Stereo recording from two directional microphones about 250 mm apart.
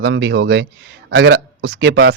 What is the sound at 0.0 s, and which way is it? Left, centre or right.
Speech, right.